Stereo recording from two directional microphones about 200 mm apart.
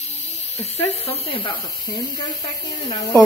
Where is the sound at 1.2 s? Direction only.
25° left (ahead or behind).